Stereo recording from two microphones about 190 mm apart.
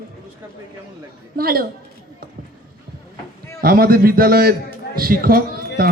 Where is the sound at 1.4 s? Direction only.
50° right (ahead or behind).